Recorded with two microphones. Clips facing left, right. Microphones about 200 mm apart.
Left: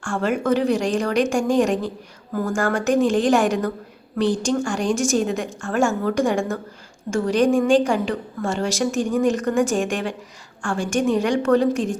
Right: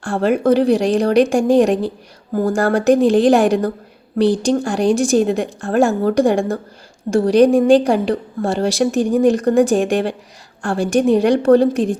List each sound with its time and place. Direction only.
0.0 s a woman's voice: 35° right (ahead or behind)